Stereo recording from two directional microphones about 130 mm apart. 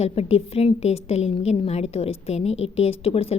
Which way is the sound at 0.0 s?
50° left (ahead or behind).